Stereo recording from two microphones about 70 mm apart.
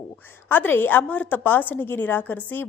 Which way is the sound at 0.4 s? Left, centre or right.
Left.